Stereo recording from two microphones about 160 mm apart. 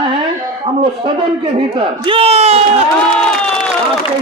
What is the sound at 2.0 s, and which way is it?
Speech, 35° right (ahead or behind).